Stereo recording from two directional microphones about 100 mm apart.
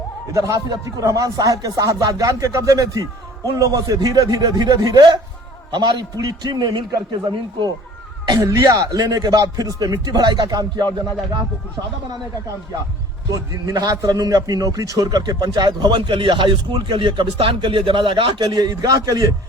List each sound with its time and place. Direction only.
0.3 s a man's voice: 30° right (ahead or behind); by 7.7 s 50° right (ahead or behind)
8.4 s a man's voice: 30° right (ahead or behind)
13.3 s a man's voice: 35° right (ahead or behind)